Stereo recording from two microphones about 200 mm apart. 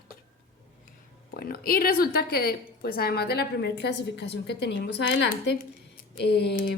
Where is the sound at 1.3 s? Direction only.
50° left (ahead or behind).